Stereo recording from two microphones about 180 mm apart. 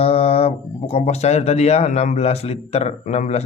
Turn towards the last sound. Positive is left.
turn(degrees=40)  # may be behind; listen again after turning